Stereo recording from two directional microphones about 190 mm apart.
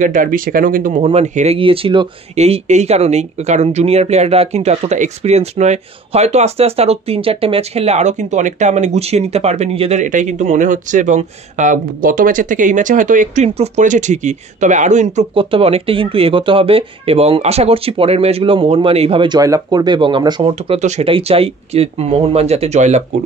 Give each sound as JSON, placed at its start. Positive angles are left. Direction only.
{"t": 0.0, "sound": "speech", "side_deg": -45}